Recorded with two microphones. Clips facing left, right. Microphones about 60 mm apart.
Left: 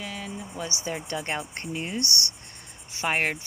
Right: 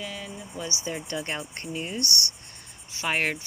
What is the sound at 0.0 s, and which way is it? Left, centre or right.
Speech, left.